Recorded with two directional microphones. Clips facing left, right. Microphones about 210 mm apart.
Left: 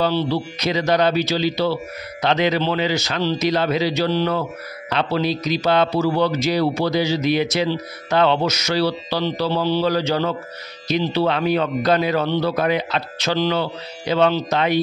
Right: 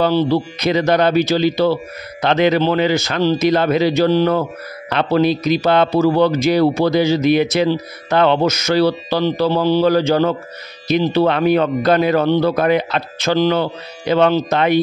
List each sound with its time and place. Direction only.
0.0 s a man's voice: 50° right (ahead or behind)